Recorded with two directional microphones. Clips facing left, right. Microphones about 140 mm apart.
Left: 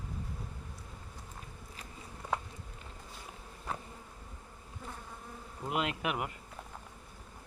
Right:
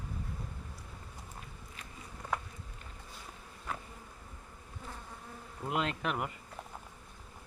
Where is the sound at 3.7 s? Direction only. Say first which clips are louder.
Left 1 dB; 35° left (ahead or behind).